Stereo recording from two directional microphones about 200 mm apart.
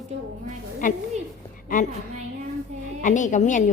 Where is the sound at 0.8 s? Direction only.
40° left (ahead or behind).